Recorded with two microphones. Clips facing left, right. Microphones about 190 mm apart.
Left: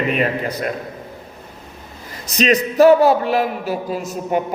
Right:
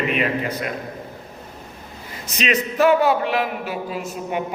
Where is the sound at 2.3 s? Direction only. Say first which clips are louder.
Left 6 dB; 40° left (ahead or behind).